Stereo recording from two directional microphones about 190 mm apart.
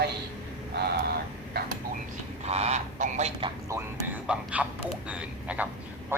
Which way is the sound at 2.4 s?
35° right (ahead or behind).